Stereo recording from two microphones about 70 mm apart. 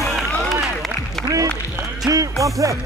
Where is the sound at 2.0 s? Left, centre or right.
Right.